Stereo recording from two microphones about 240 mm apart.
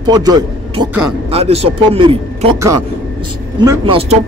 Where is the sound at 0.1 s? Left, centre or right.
Centre.